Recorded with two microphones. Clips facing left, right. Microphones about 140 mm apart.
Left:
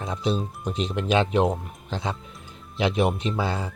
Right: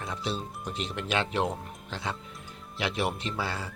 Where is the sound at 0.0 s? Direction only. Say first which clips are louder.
Left 7 dB; 20° left (ahead or behind).